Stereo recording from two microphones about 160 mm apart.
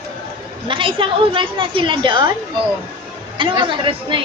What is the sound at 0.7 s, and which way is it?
A woman's voice, 35° right (ahead or behind).